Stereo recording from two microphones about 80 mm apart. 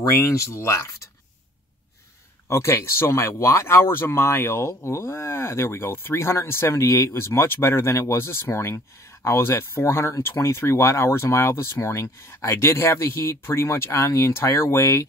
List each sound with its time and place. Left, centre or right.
0.1 s speech: left
2.4 s speech: left